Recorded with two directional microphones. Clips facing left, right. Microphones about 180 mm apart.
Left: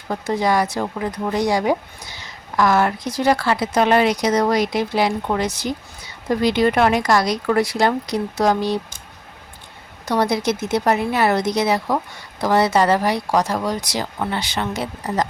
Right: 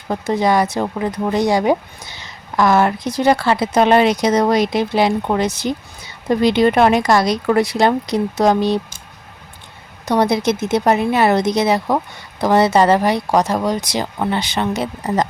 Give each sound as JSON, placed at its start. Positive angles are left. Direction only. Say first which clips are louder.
{"t": 0.1, "sound": "speech", "louder": "right 3 dB", "side_deg": -25}
{"t": 10.1, "sound": "speech", "louder": "right 3 dB", "side_deg": -20}